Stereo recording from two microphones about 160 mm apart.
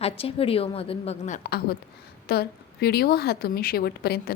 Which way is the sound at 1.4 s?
75° left (ahead or behind).